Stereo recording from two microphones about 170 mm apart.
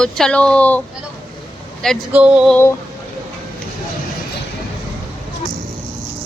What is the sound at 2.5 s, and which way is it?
Speech, 15° left (ahead or behind).